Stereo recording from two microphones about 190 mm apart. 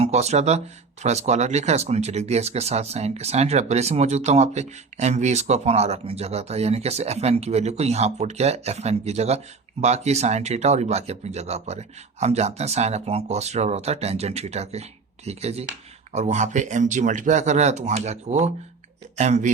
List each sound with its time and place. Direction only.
0.0 s speech: 35° right (ahead or behind)